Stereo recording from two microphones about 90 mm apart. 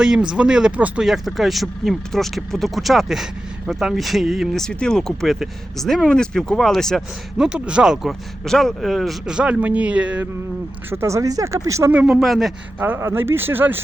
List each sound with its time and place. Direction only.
0.0 s speech: 10° right (ahead or behind)
7.3 s speech: 10° right (ahead or behind)
8.4 s speech: 5° left (ahead or behind); by 10.2 s 15° right (ahead or behind)
10.8 s speech: 30° right (ahead or behind)
11.9 s speech: 15° right (ahead or behind)
12.2 s speech: centre (ahead or behind)
12.8 s speech: 30° right (ahead or behind)